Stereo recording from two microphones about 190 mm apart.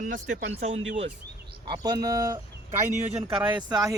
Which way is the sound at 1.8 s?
20° right (ahead or behind).